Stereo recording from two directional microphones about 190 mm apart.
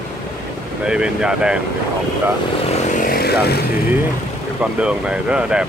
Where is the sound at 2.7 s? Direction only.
45° left (ahead or behind).